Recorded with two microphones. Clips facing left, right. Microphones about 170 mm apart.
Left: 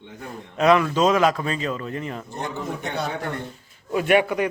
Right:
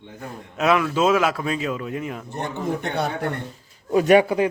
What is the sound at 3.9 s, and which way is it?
Speech, 35° right (ahead or behind).